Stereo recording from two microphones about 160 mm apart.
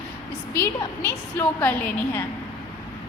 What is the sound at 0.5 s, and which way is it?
A woman's voice, 15° left (ahead or behind).